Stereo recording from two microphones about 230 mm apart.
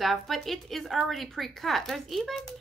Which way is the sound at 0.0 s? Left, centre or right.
Centre.